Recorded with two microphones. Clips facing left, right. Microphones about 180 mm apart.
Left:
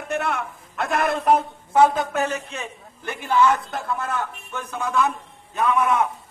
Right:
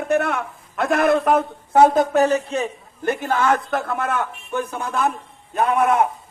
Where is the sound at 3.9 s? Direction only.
65° right (ahead or behind).